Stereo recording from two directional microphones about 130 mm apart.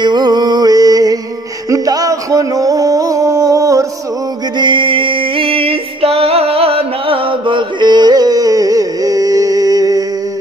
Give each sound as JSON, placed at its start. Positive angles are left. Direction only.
{"t": 0.0, "sound": "music", "side_deg": -35}
{"t": 1.7, "sound": "a sound", "side_deg": -25}
{"t": 4.6, "sound": "music", "side_deg": -40}